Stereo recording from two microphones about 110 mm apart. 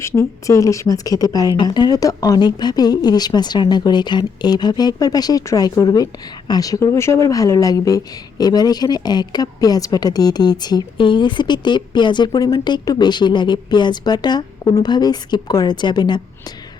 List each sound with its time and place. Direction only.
0.0 s speech: 30° left (ahead or behind); by 16.2 s 45° left (ahead or behind)